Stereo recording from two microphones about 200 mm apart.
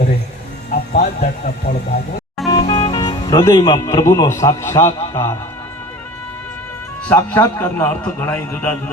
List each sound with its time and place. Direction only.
0.7 s speech: 40° left (ahead or behind)
2.5 s speech: 25° left (ahead or behind)
7.1 s a man's voice: 10° left (ahead or behind)